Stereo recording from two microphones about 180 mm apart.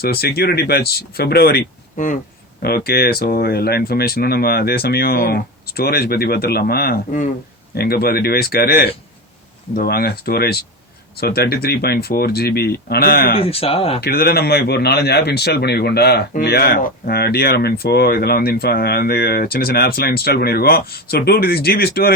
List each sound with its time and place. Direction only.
0.0 s a man's voice: 60° left (ahead or behind)
13.3 s speech: 30° left (ahead or behind)
14.0 s a man's voice: 60° left (ahead or behind)